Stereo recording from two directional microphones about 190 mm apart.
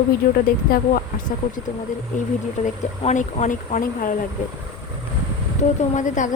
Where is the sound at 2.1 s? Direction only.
40° left (ahead or behind).